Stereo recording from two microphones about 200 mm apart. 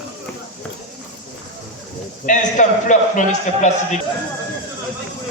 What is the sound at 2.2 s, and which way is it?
A man's voice, 40° left (ahead or behind).